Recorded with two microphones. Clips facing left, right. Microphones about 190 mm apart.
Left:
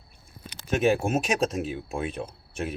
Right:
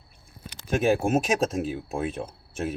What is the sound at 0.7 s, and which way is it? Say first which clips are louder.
Speech: right 1 dB; 45° right (ahead or behind).